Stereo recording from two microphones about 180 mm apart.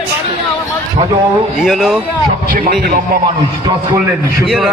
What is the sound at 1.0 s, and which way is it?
Speech, 35° right (ahead or behind).